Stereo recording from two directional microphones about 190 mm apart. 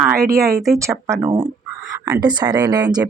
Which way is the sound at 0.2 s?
15° right (ahead or behind).